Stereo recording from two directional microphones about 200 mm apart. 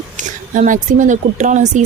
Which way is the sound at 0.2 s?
40° right (ahead or behind).